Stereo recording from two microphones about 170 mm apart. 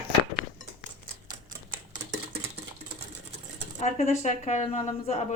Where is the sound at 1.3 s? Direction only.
55° right (ahead or behind).